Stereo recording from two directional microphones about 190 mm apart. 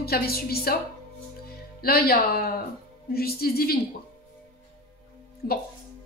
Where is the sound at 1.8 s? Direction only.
50° left (ahead or behind).